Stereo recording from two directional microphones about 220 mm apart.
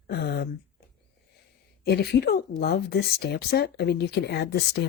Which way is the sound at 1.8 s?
45° left (ahead or behind).